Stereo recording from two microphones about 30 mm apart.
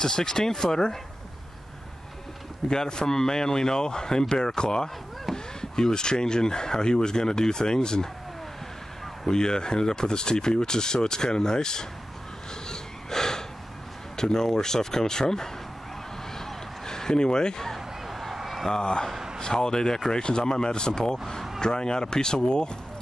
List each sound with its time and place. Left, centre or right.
0.0 s speech: left
2.7 s speech: left
9.3 s speech: left
12.6 s gasp: centre
14.1 s speech: centre
16.3 s a sound: centre
17.7 s a sound: centre
18.7 s speech: left